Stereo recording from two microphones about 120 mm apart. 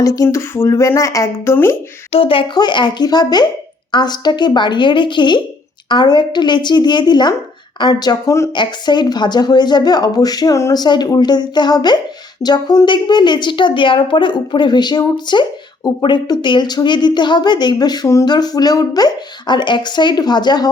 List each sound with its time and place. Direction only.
0.0 s speech: 30° left (ahead or behind)
2.1 s a woman's voice: 50° left (ahead or behind)